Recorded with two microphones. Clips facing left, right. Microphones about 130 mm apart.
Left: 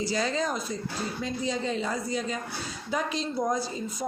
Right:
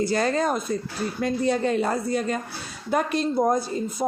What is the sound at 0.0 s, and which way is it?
Speech, 55° right (ahead or behind).